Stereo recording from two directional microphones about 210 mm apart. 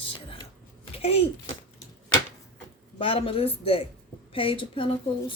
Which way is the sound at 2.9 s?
25° left (ahead or behind).